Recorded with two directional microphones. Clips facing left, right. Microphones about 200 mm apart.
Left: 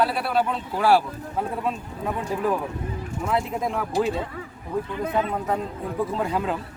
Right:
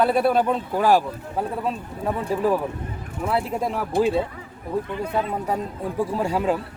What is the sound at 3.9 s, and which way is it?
Speech, 55° right (ahead or behind).